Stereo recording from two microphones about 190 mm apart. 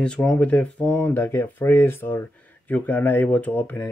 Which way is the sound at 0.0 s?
5° left (ahead or behind).